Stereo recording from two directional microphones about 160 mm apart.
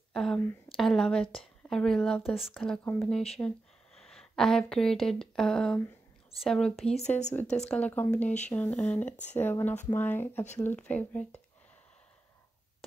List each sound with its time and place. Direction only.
0.1 s speech: 5° left (ahead or behind)
7.1 s speech: 45° left (ahead or behind)
7.6 s speech: 10° left (ahead or behind)